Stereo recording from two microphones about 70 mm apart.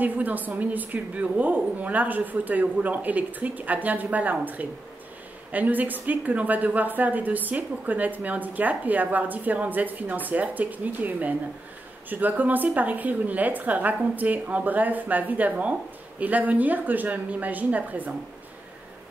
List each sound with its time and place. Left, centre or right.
0.0 s speech: right